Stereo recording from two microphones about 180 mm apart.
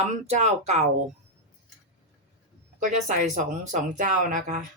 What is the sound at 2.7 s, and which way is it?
Speech, 45° right (ahead or behind).